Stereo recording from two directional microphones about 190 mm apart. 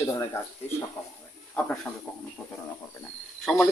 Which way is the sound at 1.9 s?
Centre (ahead or behind).